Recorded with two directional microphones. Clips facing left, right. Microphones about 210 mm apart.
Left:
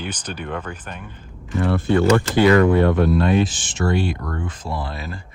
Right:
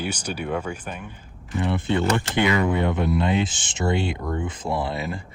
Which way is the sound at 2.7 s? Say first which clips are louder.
Left 6 dB; 20° right (ahead or behind).